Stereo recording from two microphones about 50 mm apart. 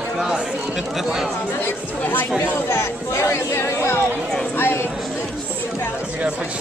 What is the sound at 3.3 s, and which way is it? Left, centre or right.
Speech, left.